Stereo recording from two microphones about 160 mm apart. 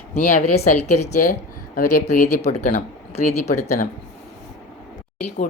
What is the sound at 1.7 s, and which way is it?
Speech, 50° left (ahead or behind).